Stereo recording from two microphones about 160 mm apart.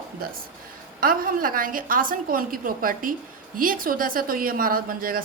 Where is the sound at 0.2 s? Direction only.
65° right (ahead or behind).